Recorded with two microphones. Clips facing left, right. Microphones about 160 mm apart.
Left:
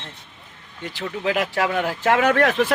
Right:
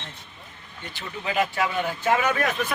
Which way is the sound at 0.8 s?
90° left.